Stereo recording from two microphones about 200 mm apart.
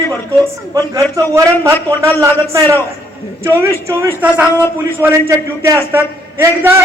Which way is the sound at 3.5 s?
15° right (ahead or behind).